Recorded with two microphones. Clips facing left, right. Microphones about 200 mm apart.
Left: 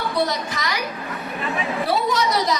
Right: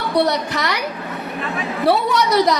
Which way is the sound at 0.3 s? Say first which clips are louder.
Right 5 dB; 65° right (ahead or behind).